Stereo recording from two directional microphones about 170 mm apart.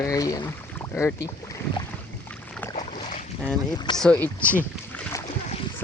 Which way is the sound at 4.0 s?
10° left (ahead or behind).